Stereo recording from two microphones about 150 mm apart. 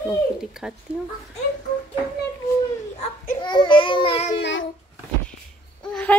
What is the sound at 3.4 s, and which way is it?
Baby cry, 30° left (ahead or behind).